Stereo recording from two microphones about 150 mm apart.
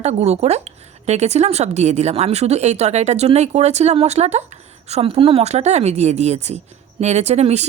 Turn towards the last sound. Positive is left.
turn(degrees=-45)  # may be behind; listen again after turning